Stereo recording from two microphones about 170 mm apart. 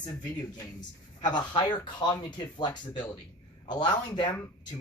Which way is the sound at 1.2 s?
25° left (ahead or behind).